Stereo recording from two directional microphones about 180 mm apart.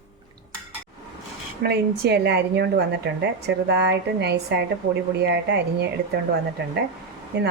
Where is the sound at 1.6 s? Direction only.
60° right (ahead or behind).